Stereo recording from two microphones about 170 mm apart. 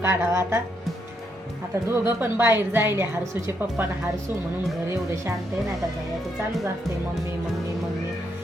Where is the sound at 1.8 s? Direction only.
15° right (ahead or behind).